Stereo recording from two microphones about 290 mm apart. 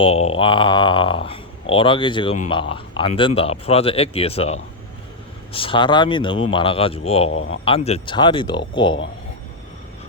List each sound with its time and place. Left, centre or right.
0.0 s speech: left
7.3 s speech: left
7.6 s speech: centre